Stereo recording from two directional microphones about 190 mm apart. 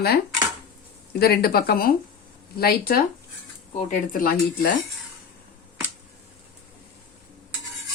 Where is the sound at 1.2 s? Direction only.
55° left (ahead or behind).